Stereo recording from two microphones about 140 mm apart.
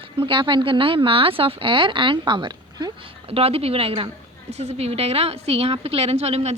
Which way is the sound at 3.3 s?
45° right (ahead or behind).